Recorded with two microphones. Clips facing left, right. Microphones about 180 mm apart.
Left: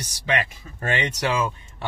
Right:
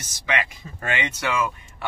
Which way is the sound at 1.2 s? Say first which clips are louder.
Left 1 dB; 30° left (ahead or behind).